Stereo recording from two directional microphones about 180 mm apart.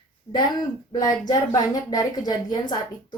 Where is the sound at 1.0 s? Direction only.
20° left (ahead or behind).